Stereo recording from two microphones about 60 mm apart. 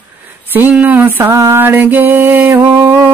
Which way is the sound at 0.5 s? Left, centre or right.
Right.